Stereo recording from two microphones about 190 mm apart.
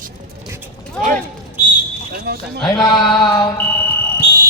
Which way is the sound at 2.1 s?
60° right (ahead or behind).